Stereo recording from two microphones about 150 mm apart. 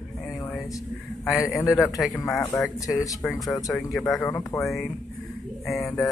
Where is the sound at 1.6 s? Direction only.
20° left (ahead or behind).